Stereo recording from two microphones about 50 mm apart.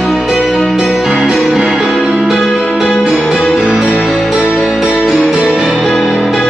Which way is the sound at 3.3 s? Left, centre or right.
Centre.